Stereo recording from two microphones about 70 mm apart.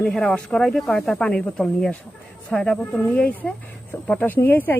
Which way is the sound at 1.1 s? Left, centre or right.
Centre.